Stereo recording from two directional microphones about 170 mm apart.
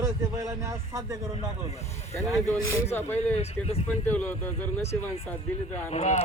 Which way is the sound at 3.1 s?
40° left (ahead or behind).